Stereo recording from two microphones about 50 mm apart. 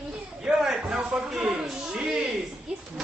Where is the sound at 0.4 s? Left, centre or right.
Centre.